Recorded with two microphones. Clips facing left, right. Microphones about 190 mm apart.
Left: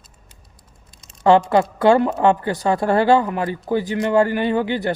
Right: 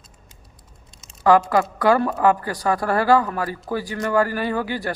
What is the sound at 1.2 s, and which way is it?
A man's voice, 25° left (ahead or behind).